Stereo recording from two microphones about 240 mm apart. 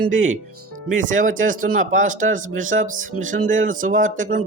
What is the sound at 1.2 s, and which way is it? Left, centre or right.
Speech, right.